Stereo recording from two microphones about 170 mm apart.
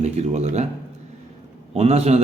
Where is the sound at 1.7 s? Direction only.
40° right (ahead or behind).